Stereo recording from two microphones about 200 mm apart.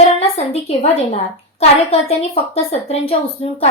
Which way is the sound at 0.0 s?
30° left (ahead or behind).